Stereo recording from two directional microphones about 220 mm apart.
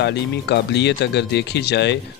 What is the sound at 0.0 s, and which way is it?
Speech, 50° left (ahead or behind).